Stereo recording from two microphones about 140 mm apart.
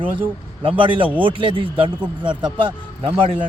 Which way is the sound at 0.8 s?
35° right (ahead or behind).